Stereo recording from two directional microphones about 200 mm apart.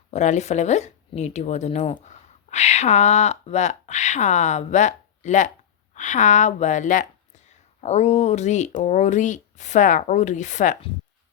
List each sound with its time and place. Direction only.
0.1 s speech: 35° left (ahead or behind)